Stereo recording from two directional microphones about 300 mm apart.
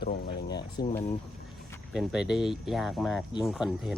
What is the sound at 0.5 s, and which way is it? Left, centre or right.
Speech, centre.